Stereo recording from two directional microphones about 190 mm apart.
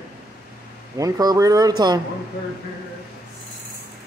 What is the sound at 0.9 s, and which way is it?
Speech, 15° right (ahead or behind).